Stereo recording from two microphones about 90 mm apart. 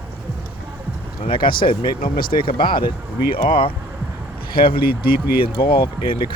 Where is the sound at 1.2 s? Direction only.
70° left (ahead or behind).